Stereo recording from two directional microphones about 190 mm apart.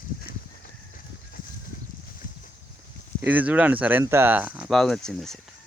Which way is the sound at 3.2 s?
10° right (ahead or behind).